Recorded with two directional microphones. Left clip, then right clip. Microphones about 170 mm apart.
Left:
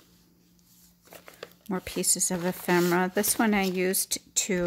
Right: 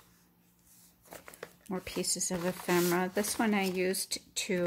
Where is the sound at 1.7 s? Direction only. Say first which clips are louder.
Left 5 dB; 40° left (ahead or behind).